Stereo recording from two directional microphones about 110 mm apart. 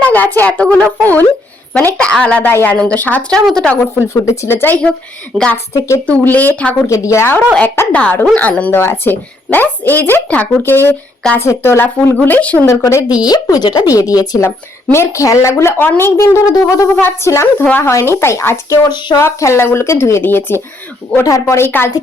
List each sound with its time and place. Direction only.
0.0 s a woman's voice: 15° left (ahead or behind)
4.1 s speech: 25° left (ahead or behind)
5.3 s a woman's voice: 5° left (ahead or behind)
6.8 s a woman's voice: 30° left (ahead or behind)
12.6 s speech: 30° left (ahead or behind)
18.9 s speech: 45° left (ahead or behind)
19.1 s speech: 25° left (ahead or behind)